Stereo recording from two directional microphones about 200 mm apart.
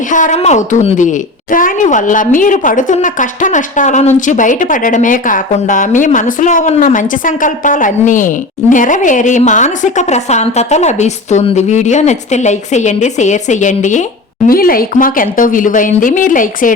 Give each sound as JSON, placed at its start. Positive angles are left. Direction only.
{"t": 0.1, "sound": "a woman's voice", "side_deg": 40}